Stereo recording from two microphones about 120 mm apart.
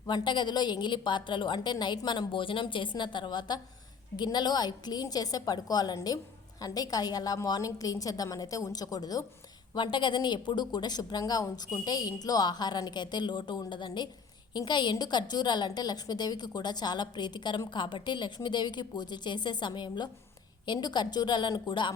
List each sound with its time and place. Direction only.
0.1 s a woman's voice: 40° left (ahead or behind)